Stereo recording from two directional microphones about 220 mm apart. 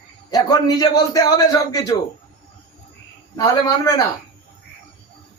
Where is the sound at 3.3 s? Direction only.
15° left (ahead or behind).